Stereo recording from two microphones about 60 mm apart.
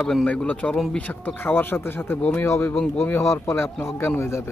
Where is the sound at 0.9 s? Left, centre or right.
Left.